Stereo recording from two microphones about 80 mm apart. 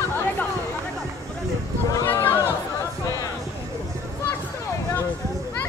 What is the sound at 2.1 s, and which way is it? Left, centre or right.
Chatter, left.